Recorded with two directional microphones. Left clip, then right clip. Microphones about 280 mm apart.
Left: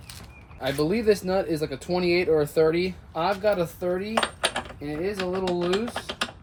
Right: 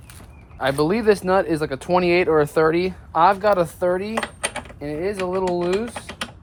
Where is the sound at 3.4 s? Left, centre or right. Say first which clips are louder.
Right 6 dB; centre.